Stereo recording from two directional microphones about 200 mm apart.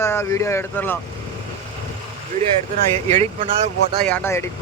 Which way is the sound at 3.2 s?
35° right (ahead or behind).